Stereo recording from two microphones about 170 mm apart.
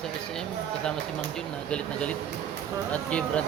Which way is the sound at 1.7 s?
5° left (ahead or behind).